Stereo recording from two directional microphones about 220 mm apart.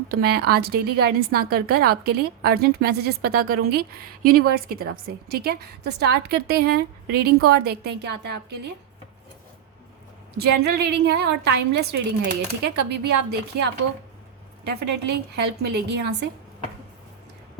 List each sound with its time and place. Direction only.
0.1 s a woman's voice: 45° right (ahead or behind)
10.3 s a woman's voice: 45° right (ahead or behind)
14.6 s a woman's voice: 50° right (ahead or behind)